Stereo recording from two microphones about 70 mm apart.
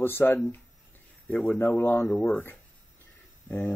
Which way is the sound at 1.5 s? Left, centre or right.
Left.